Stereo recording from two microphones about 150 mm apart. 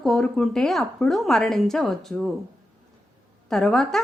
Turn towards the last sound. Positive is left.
turn(degrees=0)  # may be behind; listen again after turning